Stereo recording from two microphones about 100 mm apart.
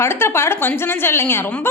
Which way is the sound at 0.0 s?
25° left (ahead or behind).